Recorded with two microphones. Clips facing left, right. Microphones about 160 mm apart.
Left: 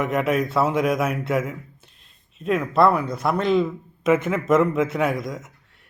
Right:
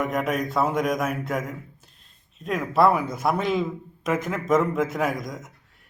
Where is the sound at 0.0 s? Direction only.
Centre (ahead or behind).